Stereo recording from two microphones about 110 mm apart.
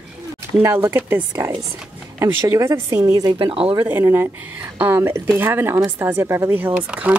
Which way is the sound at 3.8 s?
20° right (ahead or behind).